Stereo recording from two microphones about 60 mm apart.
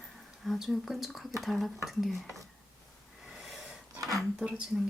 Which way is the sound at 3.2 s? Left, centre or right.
Centre.